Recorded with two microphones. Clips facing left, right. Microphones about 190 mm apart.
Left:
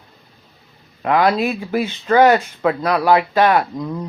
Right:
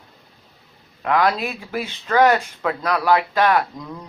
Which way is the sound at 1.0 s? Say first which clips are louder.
Left 3 dB; 25° left (ahead or behind).